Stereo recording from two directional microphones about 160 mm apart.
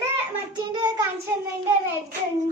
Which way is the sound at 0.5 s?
25° right (ahead or behind).